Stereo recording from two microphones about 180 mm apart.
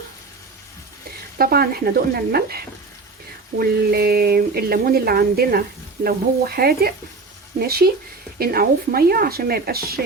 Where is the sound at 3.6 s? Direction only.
60° right (ahead or behind).